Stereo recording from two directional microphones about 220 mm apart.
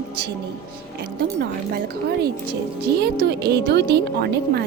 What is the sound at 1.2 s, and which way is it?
Speech, 45° right (ahead or behind).